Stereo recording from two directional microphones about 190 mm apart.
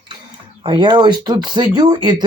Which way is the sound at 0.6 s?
25° right (ahead or behind).